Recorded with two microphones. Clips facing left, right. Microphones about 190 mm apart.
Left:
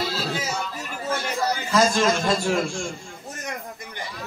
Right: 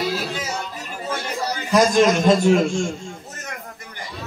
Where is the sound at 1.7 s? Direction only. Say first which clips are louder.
Right 5 dB; 15° right (ahead or behind).